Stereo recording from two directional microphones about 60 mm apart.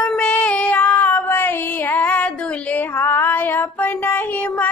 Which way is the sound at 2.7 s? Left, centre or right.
Left.